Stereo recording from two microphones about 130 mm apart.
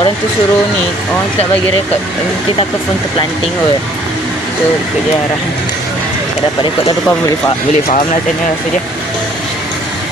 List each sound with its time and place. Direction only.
7.1 s speech: 25° left (ahead or behind)